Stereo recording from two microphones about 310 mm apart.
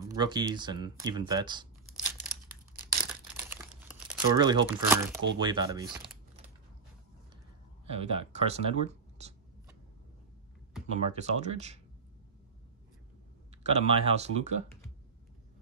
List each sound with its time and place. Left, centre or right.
0.0 s speech: centre
3.4 s crumpling: centre
5.4 s speech: centre
7.8 s speech: centre
10.9 s speech: right
13.6 s speech: centre